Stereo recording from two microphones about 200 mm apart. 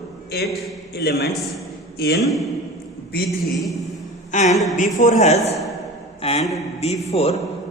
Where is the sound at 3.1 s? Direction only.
50° left (ahead or behind).